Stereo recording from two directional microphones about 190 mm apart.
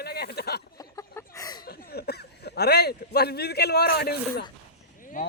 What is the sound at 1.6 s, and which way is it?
Speech, 55° left (ahead or behind).